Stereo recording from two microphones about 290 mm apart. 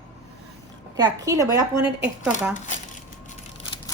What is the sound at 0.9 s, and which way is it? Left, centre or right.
Speech, centre.